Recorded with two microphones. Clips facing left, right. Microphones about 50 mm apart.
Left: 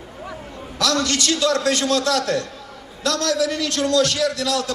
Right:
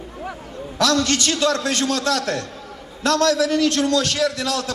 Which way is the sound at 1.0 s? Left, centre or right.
Right.